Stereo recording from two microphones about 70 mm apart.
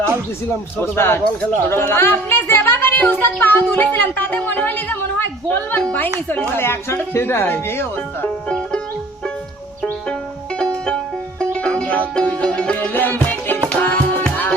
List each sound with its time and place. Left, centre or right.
0.8 s speech: left
8.4 s music: centre
10.6 s music: centre